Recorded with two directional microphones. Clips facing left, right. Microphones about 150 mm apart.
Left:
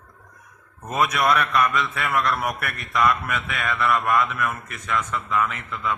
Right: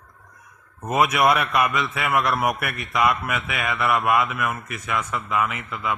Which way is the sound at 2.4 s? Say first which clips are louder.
Right 3 dB; 5° right (ahead or behind).